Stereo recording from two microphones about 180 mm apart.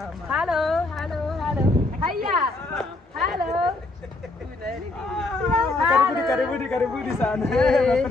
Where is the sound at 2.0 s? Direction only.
50° right (ahead or behind).